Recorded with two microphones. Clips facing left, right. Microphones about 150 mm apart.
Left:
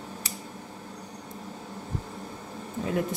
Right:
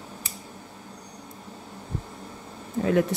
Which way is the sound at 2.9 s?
85° right.